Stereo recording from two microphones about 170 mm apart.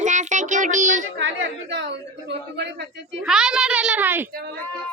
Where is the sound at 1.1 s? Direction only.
90° right.